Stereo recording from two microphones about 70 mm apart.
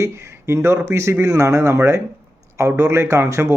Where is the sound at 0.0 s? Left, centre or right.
Right.